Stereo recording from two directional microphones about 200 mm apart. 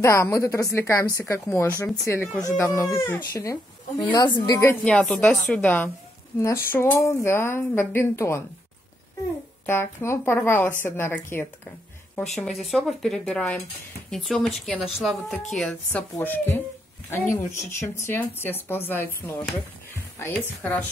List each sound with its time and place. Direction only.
0.0 s speech: 15° left (ahead or behind)
9.7 s a woman's voice: 10° left (ahead or behind)